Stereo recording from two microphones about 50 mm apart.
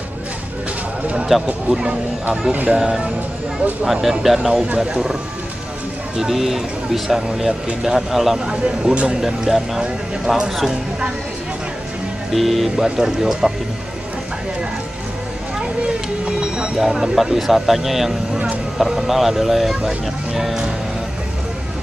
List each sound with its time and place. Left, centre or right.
1.3 s speech: centre
2.5 s speech: right
2.8 s speech: centre
6.1 s speech: centre
8.5 s speech: centre
9.2 s speech: centre
12.3 s speech: centre
12.7 s speech: centre
16.3 s a sound: centre
16.8 s speech: centre